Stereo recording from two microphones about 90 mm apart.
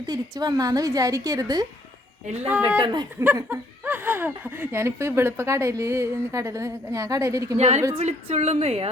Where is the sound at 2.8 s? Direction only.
55° right (ahead or behind).